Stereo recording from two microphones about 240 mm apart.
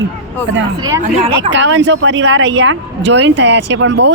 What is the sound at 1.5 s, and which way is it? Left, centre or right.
Speech, right.